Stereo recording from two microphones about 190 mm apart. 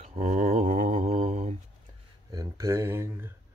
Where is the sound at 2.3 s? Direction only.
15° right (ahead or behind).